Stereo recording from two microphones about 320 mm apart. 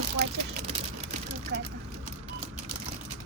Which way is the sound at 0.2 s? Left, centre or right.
Right.